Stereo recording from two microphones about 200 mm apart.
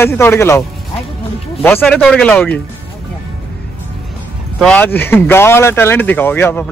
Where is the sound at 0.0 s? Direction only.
10° left (ahead or behind).